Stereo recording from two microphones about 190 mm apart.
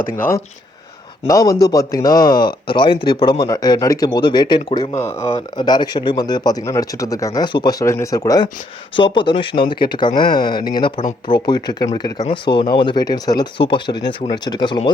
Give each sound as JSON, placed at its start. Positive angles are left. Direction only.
{"t": 0.0, "sound": "speech", "side_deg": 10}